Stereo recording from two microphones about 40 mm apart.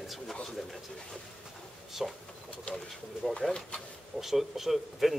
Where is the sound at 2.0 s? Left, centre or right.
Centre.